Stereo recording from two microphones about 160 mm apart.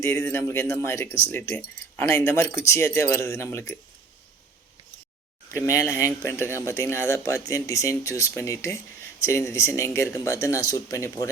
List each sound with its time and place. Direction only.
0.0 s speech: 15° left (ahead or behind)
5.5 s speech: 20° left (ahead or behind)